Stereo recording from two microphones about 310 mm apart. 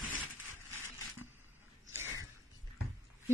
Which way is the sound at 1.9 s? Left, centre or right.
Centre.